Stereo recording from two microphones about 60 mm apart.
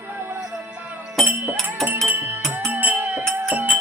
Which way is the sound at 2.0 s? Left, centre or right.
Right.